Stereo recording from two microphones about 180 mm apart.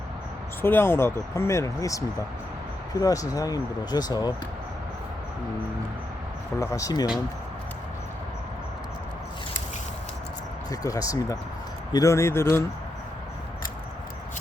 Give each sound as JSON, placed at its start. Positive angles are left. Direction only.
{"t": 0.6, "sound": "speech", "side_deg": 10}
{"t": 6.6, "sound": "speech", "side_deg": 20}
{"t": 10.7, "sound": "speech", "side_deg": 20}